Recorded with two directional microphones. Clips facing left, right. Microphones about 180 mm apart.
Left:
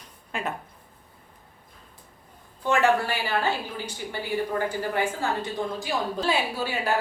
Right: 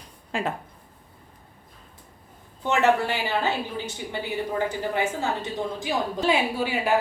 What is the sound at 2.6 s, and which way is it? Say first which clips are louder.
A woman's voice: right 1 dB; 20° right (ahead or behind).